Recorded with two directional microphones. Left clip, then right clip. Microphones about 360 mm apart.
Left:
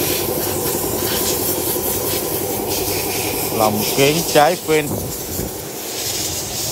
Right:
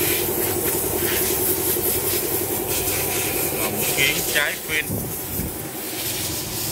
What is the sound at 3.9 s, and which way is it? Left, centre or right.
Speech, centre.